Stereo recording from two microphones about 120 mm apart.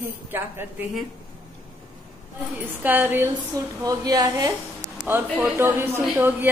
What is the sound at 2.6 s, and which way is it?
Speech, 15° right (ahead or behind).